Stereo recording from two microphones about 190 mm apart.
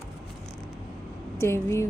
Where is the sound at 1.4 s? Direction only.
15° left (ahead or behind).